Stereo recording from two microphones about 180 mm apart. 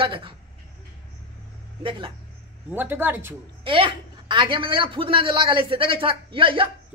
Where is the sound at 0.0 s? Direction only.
30° right (ahead or behind).